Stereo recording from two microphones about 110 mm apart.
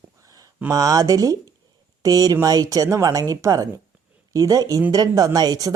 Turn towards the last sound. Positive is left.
turn(degrees=-35)  # may be behind; listen again after turning